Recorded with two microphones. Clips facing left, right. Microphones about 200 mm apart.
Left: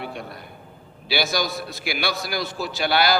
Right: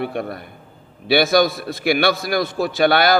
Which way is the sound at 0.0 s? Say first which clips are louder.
Right 9 dB; 55° right (ahead or behind).